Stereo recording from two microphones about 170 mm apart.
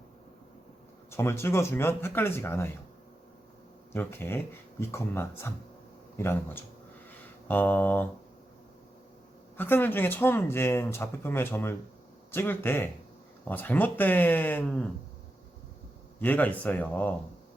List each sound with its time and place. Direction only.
1.1 s speech: 15° left (ahead or behind)
3.9 s speech: 15° left (ahead or behind)
9.6 s speech: 10° left (ahead or behind)
16.2 s speech: 10° left (ahead or behind)